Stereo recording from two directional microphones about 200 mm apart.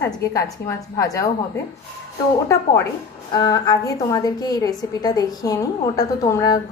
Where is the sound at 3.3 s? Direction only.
20° left (ahead or behind).